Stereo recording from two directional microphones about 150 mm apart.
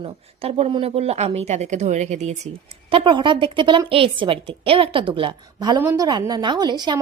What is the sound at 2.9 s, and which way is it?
A woman's voice, 35° right (ahead or behind).